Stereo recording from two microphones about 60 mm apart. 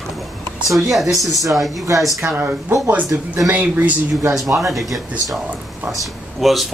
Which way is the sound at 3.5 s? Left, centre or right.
Right.